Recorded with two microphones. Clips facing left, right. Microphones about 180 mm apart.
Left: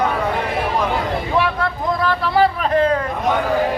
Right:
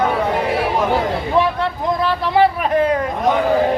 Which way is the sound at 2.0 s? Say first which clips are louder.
Right 1 dB; 20° right (ahead or behind).